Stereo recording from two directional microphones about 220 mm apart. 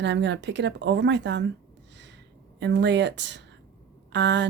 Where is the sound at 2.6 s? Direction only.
55° right (ahead or behind).